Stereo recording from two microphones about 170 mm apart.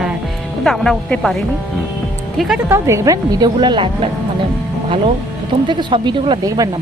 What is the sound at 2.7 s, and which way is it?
Speech, 15° right (ahead or behind).